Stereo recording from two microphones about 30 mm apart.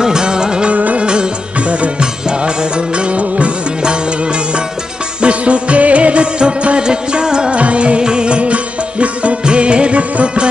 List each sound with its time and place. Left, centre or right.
0.0 s music: right
0.7 s music: right
0.9 s music: right
3.0 s music of bollywood: right
3.8 s music: right
5.2 s music: right
7.5 s music: right
9.4 s music: right